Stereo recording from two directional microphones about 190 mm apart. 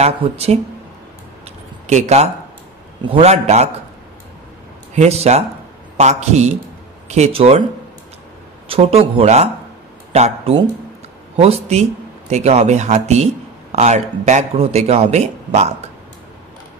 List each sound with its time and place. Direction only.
0.0 s a man's voice: 35° right (ahead or behind)
1.9 s a man's voice: 35° right (ahead or behind)
4.9 s a man's voice: 35° right (ahead or behind)
8.6 s a man's voice: 30° right (ahead or behind)